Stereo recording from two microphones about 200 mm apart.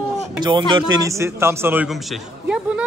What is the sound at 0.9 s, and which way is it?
Speech, 15° right (ahead or behind).